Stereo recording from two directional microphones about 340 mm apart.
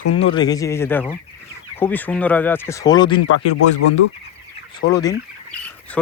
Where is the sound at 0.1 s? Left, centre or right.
Centre.